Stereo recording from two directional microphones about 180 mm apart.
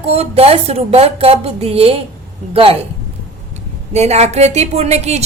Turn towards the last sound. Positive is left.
turn(degrees=-35)  # may be behind; listen again after turning